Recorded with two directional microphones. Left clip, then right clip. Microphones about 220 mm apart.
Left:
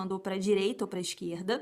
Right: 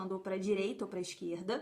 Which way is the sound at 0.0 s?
40° left (ahead or behind).